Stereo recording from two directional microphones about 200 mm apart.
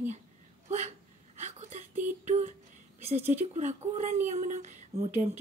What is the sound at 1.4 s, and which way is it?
Whimper, 35° right (ahead or behind).